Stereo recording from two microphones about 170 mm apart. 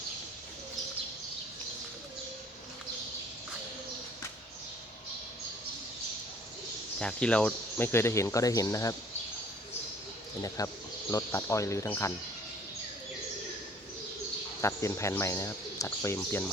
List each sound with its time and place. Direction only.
7.0 s speech: 5° left (ahead or behind)
10.6 s speech: 20° left (ahead or behind)
14.6 s speech: 15° left (ahead or behind)